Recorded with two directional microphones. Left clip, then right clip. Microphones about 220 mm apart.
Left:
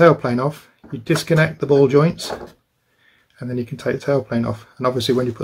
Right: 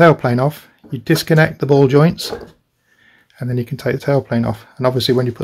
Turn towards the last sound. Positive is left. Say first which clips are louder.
# right 3 dB
turn(degrees=-35)  # may be behind; listen again after turning